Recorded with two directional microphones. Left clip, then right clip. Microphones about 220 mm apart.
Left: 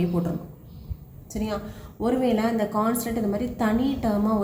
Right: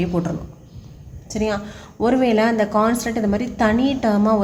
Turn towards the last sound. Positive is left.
turn(degrees=-45)  # may be behind; listen again after turning